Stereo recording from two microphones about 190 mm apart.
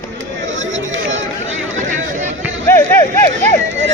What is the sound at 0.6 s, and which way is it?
Chatter, 85° right.